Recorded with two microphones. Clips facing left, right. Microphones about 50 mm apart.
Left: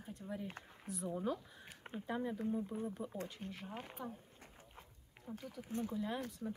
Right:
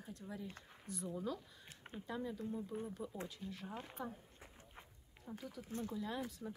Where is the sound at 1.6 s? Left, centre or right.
Centre.